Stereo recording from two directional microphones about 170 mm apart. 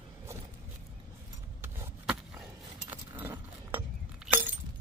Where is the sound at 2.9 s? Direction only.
10° right (ahead or behind).